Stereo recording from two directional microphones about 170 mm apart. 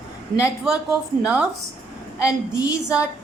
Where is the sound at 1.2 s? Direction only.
5° right (ahead or behind).